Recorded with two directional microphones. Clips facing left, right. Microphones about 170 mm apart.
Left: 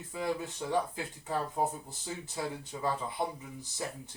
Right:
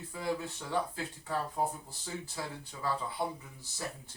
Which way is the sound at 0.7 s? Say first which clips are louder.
Left 2 dB; 20° left (ahead or behind).